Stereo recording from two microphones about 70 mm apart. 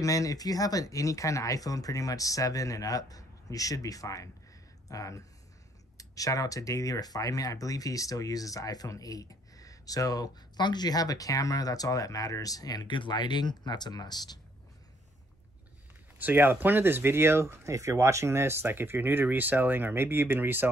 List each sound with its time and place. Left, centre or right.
0.0 s speech: left
16.2 s speech: right